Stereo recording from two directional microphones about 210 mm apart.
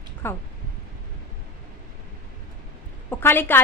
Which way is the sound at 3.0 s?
10° left (ahead or behind).